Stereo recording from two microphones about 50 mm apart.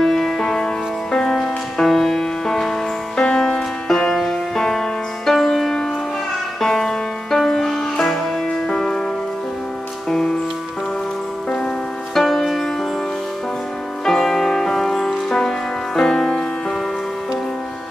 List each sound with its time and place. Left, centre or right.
0.0 s music: centre
10.0 s music: centre
12.1 s music: centre
14.0 s music: centre